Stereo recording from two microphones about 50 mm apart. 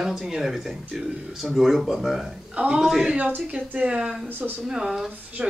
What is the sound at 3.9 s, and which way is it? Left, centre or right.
Speech, right.